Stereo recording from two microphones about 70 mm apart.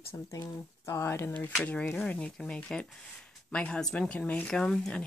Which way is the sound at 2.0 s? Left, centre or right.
Centre.